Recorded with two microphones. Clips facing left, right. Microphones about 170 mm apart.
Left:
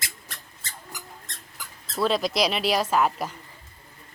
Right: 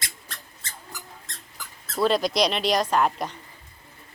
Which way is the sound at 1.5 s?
Centre (ahead or behind).